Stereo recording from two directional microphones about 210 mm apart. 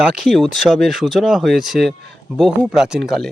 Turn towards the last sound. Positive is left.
turn(degrees=0)  # may be behind; listen again after turning